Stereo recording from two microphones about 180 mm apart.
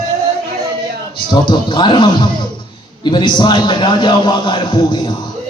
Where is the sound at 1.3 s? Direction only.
25° left (ahead or behind).